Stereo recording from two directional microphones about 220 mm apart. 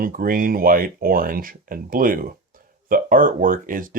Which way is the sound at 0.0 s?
40° right (ahead or behind).